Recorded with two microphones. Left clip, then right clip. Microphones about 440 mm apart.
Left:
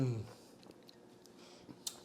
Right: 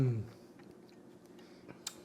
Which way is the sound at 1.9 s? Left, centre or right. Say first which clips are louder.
Left 1 dB; right.